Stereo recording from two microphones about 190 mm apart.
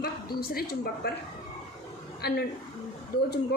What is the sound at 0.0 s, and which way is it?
A woman's voice, 55° left (ahead or behind).